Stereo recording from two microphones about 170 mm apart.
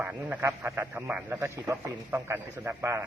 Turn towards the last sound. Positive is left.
turn(degrees=-15)  # may be behind; listen again after turning